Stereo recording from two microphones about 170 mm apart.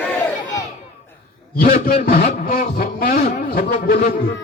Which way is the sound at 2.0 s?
60° left (ahead or behind).